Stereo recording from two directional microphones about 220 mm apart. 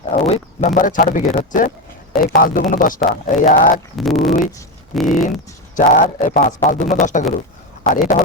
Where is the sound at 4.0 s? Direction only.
Centre (ahead or behind).